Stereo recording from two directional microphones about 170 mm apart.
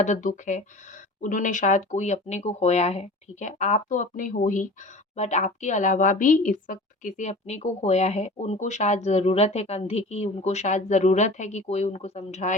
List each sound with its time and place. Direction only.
0.0 s a woman's voice: 45° left (ahead or behind)